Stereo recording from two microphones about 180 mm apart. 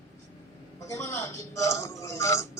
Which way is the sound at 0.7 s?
15° left (ahead or behind).